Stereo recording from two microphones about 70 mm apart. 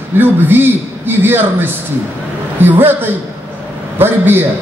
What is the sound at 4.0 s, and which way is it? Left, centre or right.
Speech, right.